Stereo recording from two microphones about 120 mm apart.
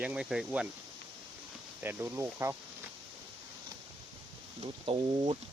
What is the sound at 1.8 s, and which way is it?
Speech, 20° right (ahead or behind).